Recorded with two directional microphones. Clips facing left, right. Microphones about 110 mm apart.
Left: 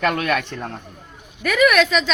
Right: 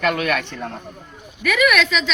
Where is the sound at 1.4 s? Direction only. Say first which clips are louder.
Left 2 dB; 35° left (ahead or behind).